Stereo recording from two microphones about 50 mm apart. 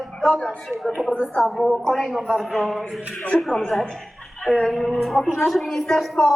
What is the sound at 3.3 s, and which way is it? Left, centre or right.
Speech, left.